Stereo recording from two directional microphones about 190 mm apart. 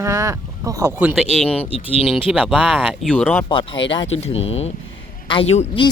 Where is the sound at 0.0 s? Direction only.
15° right (ahead or behind).